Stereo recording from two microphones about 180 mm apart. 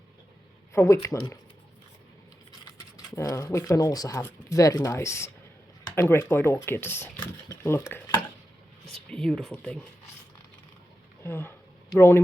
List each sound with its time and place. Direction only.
0.7 s speech: 15° left (ahead or behind)
3.2 s speech: 15° left (ahead or behind)
11.2 s speech: 10° left (ahead or behind)